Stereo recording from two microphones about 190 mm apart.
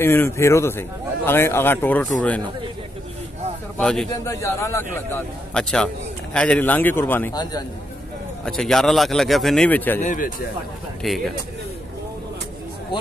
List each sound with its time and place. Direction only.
0.0 s a man's voice: 10° left (ahead or behind)
3.7 s speech: 5° left (ahead or behind)
4.1 s a man's voice: 15° left (ahead or behind)
8.5 s speech: centre (ahead or behind)
10.0 s speech: 45° left (ahead or behind)
11.0 s speech: centre (ahead or behind)